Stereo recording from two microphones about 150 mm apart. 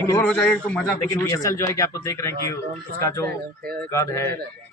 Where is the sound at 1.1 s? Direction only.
20° left (ahead or behind).